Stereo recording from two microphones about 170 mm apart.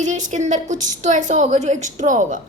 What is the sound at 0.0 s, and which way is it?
A woman's voice, 45° right (ahead or behind).